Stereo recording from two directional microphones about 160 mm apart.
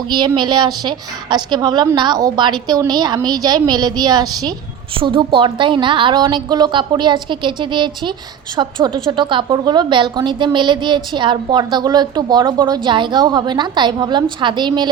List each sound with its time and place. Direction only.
0.3 s a woman's voice: 25° right (ahead or behind)